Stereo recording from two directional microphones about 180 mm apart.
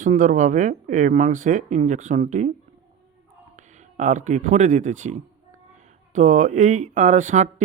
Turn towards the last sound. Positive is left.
turn(degrees=-40)  # may be behind; listen again after turning